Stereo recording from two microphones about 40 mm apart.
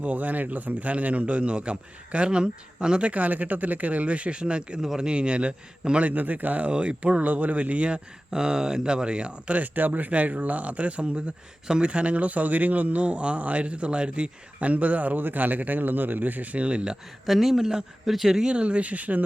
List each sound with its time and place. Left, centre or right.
0.0 s a man's voice: right
3.1 s a man's voice: right
4.8 s speech: centre
5.0 s speech: right
6.1 s a man's voice: right
9.6 s a man's voice: right
13.1 s a man's voice: right
14.7 s a man's voice: right
15.2 s speech: right
17.2 s speech: centre
18.5 s a man's voice: right